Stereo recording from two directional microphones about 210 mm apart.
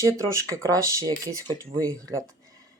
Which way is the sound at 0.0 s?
15° right (ahead or behind).